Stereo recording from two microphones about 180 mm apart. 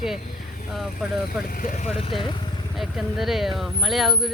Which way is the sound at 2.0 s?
25° left (ahead or behind).